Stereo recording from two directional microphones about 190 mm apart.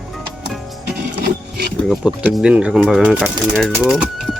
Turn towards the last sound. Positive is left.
turn(degrees=0)  # may be behind; listen again after turning